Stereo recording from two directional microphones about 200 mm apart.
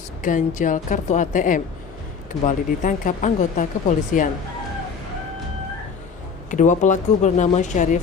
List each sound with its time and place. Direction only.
0.2 s speech: 40° left (ahead or behind)
6.5 s speech: 40° left (ahead or behind)